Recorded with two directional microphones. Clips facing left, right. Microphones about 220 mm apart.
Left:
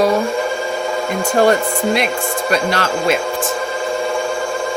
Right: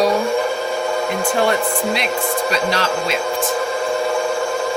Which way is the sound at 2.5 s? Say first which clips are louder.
Left 4 dB; 50° left (ahead or behind).